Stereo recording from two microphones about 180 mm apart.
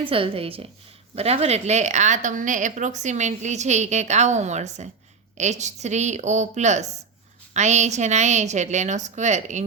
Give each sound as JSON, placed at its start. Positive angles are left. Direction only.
{"t": 0.0, "sound": "a woman's voice", "side_deg": -30}